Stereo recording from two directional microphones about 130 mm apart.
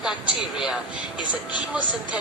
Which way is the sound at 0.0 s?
5° right (ahead or behind).